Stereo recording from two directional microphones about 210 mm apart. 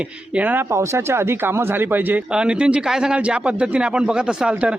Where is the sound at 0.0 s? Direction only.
5° right (ahead or behind).